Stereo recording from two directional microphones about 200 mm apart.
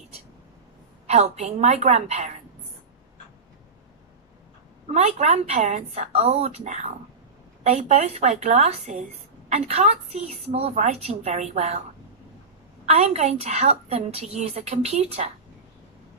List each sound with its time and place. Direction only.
1.0 s a woman's voice: 35° right (ahead or behind)
4.8 s a woman's voice: 35° right (ahead or behind)
12.8 s a woman's voice: 35° right (ahead or behind)